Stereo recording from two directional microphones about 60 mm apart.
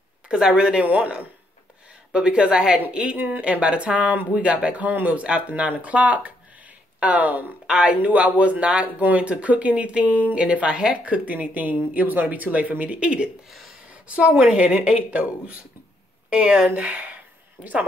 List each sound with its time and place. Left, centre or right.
0.6 s a woman's voice: centre
17.6 s speech: centre